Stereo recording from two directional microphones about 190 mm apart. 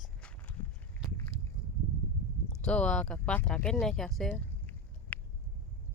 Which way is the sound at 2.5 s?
5° left (ahead or behind).